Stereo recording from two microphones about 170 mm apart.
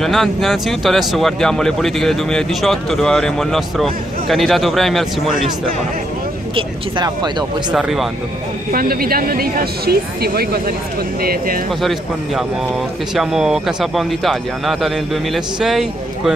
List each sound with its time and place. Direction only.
0.0 s speech: centre (ahead or behind)
6.5 s speech: 25° right (ahead or behind)
7.7 s speech: centre (ahead or behind)
8.7 s speech: 60° right (ahead or behind)
11.8 s speech: centre (ahead or behind)